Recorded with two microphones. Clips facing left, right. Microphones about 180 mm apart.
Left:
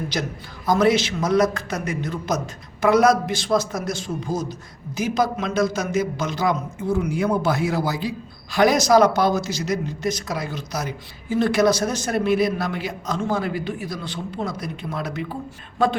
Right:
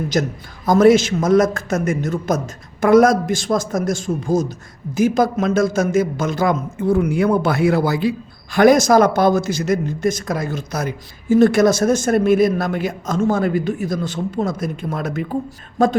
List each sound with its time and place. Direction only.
0.1 s a man's voice: 45° right (ahead or behind)